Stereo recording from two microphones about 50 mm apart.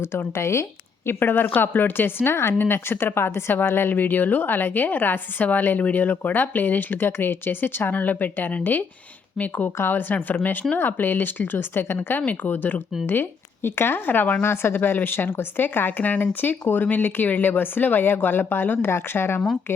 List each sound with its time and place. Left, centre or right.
0.1 s speech: left
1.0 s a woman's voice: left
9.6 s a woman's voice: left
12.2 s a woman's voice: left
13.1 s a woman's voice: left
14.4 s a woman's voice: left
18.9 s speech: left